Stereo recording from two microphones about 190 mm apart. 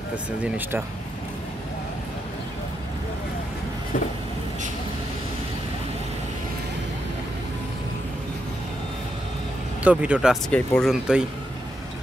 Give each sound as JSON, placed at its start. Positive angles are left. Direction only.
{"t": 0.4, "sound": "speech", "side_deg": -10}
{"t": 9.8, "sound": "speech", "side_deg": -5}
{"t": 10.5, "sound": "speech", "side_deg": 5}